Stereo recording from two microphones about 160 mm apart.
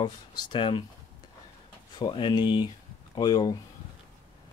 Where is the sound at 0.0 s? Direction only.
30° left (ahead or behind).